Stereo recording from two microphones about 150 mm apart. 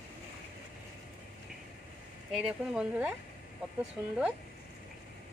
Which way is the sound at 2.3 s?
5° right (ahead or behind).